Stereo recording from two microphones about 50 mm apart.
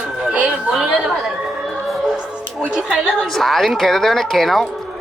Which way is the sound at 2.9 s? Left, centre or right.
Centre.